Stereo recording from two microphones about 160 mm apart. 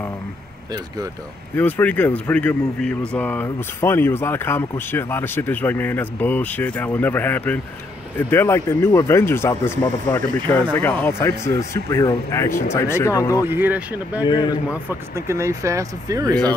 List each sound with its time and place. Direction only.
1.6 s speech: 10° left (ahead or behind)
13.5 s speech: 10° right (ahead or behind)
14.2 s a man's voice: 25° left (ahead or behind)
14.7 s speech: 15° right (ahead or behind)